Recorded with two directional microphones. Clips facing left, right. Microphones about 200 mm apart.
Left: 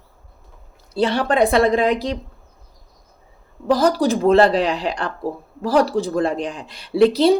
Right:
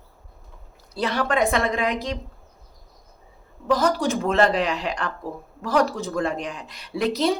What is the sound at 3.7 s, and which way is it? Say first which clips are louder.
Speech: left 5 dB; 35° left (ahead or behind).